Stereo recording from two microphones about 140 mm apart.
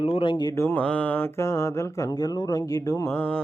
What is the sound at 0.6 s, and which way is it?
Mantra, 10° left (ahead or behind).